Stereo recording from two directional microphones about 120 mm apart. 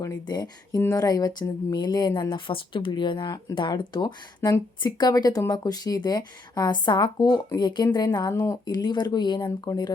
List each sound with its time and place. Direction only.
0.0 s speech: 35° left (ahead or behind)